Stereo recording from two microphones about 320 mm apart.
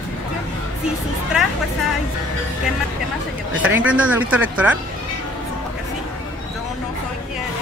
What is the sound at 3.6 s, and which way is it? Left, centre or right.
Speech, centre.